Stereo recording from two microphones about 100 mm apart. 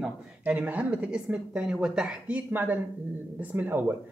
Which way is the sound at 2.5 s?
20° right (ahead or behind).